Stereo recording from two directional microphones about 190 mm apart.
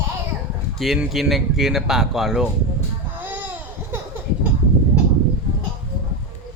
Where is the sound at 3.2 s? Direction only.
10° right (ahead or behind).